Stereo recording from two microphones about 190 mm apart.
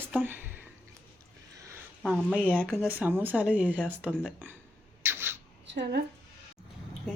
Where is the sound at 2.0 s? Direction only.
Centre (ahead or behind).